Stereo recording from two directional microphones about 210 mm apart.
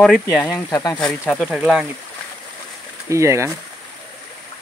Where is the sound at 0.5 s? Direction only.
15° left (ahead or behind).